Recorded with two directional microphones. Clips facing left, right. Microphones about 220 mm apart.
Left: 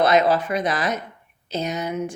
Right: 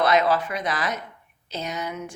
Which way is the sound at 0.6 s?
20° left (ahead or behind).